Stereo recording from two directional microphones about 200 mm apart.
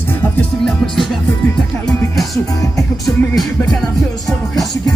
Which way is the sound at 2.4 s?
15° left (ahead or behind).